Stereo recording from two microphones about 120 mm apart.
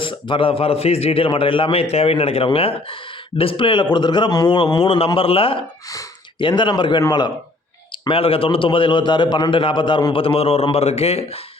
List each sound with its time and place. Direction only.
0.0 s a man's voice: 45° left (ahead or behind)
8.0 s a man's voice: 50° left (ahead or behind)